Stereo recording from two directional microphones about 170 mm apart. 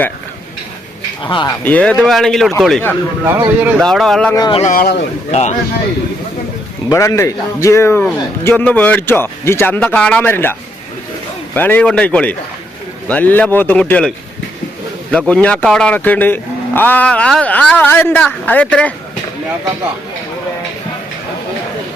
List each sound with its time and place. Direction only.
1.2 s speech: 30° left (ahead or behind)
1.6 s speech: 5° left (ahead or behind)
3.2 s speech: 10° right (ahead or behind)
3.8 s speech: centre (ahead or behind)
4.4 s speech: 25° left (ahead or behind)
4.6 s speech: 55° left (ahead or behind)
5.3 s a man's voice: 40° left (ahead or behind)
6.9 s a man's voice: 15° left (ahead or behind)
15.3 s a man's voice: 5° left (ahead or behind)